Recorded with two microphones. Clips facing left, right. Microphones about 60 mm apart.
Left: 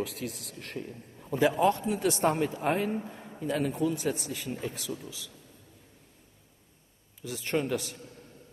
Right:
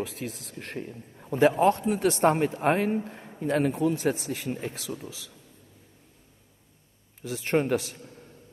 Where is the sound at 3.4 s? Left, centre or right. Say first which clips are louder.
Right 4 dB; right.